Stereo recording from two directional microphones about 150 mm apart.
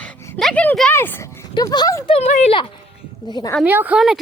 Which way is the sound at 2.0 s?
45° left (ahead or behind).